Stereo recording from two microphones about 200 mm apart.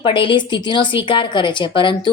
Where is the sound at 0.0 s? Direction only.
25° left (ahead or behind).